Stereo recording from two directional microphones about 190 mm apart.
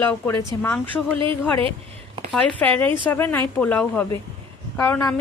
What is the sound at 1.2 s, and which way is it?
Speech, 30° right (ahead or behind).